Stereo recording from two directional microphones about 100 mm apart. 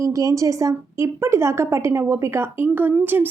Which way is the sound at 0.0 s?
35° right (ahead or behind).